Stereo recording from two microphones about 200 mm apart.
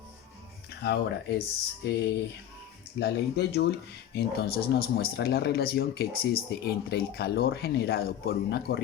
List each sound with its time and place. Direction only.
0.8 s speech: 55° left (ahead or behind)